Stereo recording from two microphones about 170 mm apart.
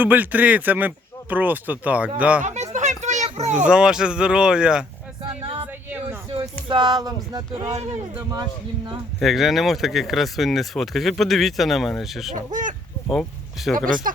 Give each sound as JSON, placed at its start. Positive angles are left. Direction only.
{"t": 0.0, "sound": "speech", "side_deg": -10}
{"t": 2.4, "sound": "a sound", "side_deg": -45}
{"t": 3.5, "sound": "speech", "side_deg": -5}
{"t": 5.2, "sound": "music", "side_deg": -35}
{"t": 5.9, "sound": "a sound", "side_deg": -10}
{"t": 6.7, "sound": "music", "side_deg": -25}
{"t": 9.2, "sound": "speech", "side_deg": 0}
{"t": 12.3, "sound": "speech", "side_deg": -50}
{"t": 13.6, "sound": "speech", "side_deg": 0}